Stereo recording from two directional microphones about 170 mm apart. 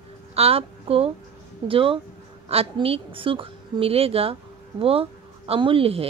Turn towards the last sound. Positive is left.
turn(degrees=-35)  # may be behind; listen again after turning